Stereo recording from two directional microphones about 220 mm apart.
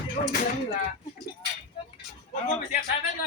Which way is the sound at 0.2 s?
30° left (ahead or behind).